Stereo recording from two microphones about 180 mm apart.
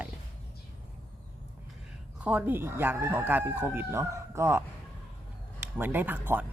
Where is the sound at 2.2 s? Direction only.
10° right (ahead or behind).